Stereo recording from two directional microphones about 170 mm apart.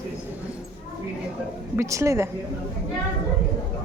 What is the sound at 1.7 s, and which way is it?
Speech, 15° right (ahead or behind).